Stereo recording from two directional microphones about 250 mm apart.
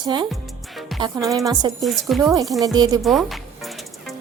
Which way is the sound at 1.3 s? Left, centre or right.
Centre.